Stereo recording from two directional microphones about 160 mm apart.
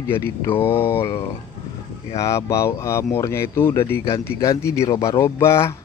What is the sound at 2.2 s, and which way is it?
A man's voice, 20° left (ahead or behind).